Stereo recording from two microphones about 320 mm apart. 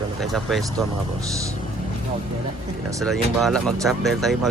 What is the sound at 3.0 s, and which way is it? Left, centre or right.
Speech, centre.